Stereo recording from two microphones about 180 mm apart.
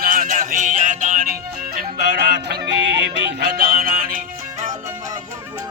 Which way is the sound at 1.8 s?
65° right (ahead or behind).